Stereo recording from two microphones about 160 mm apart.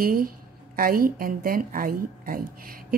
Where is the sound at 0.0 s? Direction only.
65° right (ahead or behind).